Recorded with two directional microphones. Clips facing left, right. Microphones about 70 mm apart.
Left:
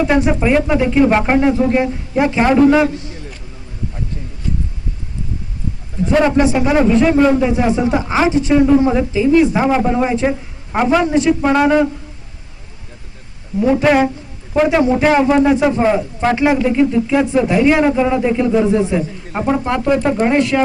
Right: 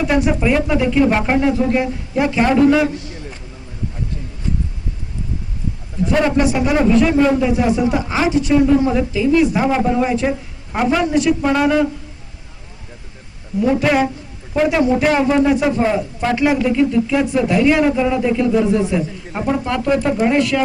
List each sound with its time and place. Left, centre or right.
0.0 s a man's voice: left
6.1 s a man's voice: left
13.6 s a man's voice: left